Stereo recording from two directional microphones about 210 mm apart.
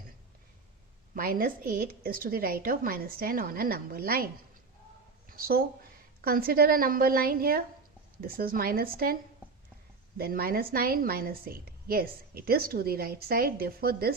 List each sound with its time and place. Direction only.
1.1 s a woman's voice: 45° right (ahead or behind)
5.3 s a woman's voice: 45° right (ahead or behind)
10.2 s a woman's voice: 45° right (ahead or behind)